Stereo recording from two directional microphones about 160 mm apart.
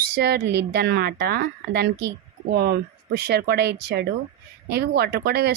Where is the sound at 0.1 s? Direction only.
90° right.